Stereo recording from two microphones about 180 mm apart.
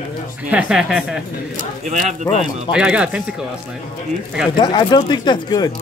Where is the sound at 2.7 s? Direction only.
5° right (ahead or behind).